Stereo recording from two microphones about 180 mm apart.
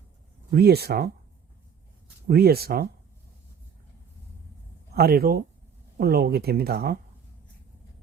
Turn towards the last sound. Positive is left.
turn(degrees=-60)  # may be behind; listen again after turning